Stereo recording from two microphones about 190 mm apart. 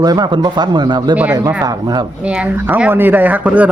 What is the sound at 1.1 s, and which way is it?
Speech, 10° right (ahead or behind).